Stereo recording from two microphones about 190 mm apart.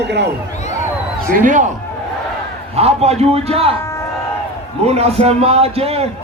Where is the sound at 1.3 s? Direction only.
45° right (ahead or behind).